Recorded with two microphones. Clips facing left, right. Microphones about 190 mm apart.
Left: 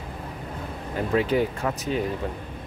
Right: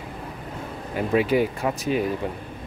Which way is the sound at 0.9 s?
10° right (ahead or behind).